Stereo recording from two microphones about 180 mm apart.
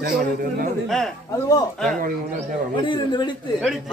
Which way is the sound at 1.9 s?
50° right (ahead or behind).